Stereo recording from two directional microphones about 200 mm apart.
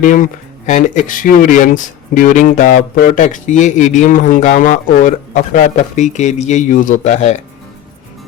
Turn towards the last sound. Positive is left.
turn(degrees=35)  # may be behind; listen again after turning